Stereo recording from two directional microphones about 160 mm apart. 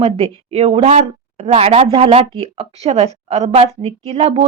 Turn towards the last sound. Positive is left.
turn(degrees=-40)  # may be behind; listen again after turning